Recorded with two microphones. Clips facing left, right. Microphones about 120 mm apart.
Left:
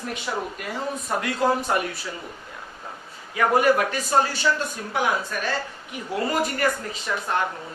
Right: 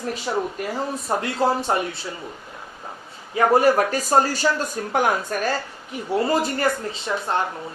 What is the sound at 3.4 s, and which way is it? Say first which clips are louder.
Speech: right 3 dB; 35° right (ahead or behind).